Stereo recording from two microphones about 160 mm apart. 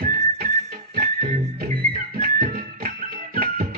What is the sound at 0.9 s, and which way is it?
Music, 55° right (ahead or behind).